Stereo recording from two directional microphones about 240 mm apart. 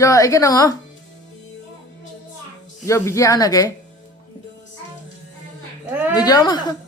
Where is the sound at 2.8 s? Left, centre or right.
Centre.